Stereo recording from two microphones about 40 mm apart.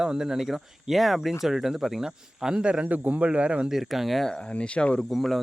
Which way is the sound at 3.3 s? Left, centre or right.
Right.